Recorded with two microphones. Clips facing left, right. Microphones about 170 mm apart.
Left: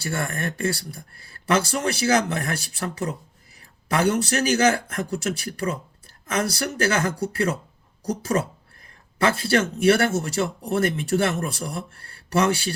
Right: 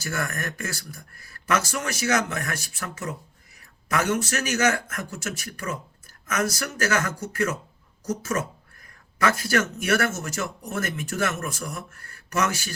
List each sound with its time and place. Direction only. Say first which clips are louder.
0.0 s speech: left 3 dB; 30° left (ahead or behind)